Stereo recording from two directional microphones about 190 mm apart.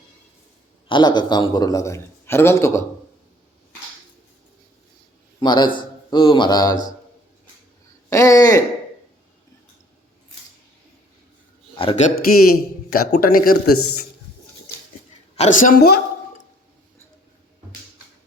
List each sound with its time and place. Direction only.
0.9 s a man's voice: 25° left (ahead or behind)
5.4 s a man's voice: 25° left (ahead or behind)
8.1 s a man's voice: 15° left (ahead or behind)
11.7 s a man's voice: 25° left (ahead or behind); by 13.6 s 50° left (ahead or behind)
15.4 s a man's voice: 45° left (ahead or behind)